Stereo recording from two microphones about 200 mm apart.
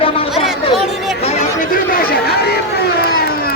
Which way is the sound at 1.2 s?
30° left (ahead or behind).